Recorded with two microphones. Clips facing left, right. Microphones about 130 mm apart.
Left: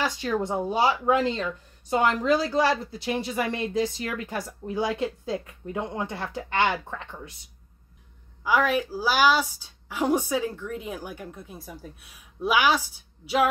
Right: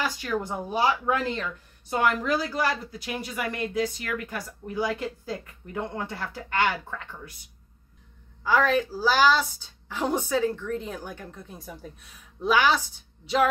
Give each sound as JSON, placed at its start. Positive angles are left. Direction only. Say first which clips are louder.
{"t": 0.0, "sound": "speech", "louder": "left 2 dB", "side_deg": 25}
{"t": 8.5, "sound": "a woman's voice", "louder": "right 1 dB", "side_deg": 10}